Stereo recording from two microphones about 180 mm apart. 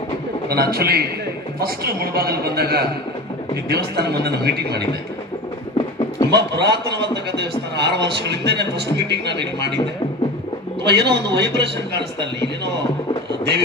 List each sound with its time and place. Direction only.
0.4 s a man's voice: 60° right (ahead or behind)
5.7 s a sound: 25° left (ahead or behind)
6.3 s a man's voice: 65° right (ahead or behind)
10.8 s a man's voice: 70° right (ahead or behind)